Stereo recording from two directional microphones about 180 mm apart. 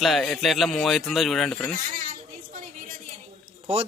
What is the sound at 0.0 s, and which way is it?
A man's voice, centre (ahead or behind).